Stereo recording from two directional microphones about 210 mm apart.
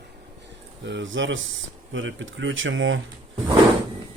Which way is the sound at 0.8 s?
60° right (ahead or behind).